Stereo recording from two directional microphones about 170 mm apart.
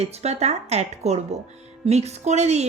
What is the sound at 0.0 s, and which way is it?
A woman's voice, 40° right (ahead or behind).